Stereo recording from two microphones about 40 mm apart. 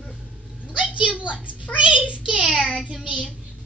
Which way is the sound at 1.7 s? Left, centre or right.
Right.